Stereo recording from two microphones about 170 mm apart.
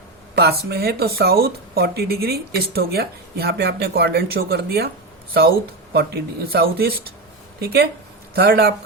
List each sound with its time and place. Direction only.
0.3 s speech: 70° right (ahead or behind)